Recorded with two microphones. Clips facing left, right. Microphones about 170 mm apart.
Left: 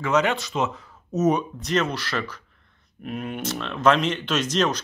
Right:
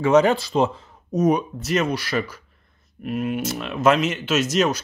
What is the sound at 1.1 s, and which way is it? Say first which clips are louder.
Speech: right 2 dB; 10° right (ahead or behind).